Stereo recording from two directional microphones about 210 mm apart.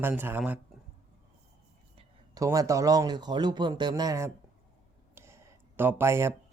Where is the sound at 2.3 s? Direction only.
15° right (ahead or behind).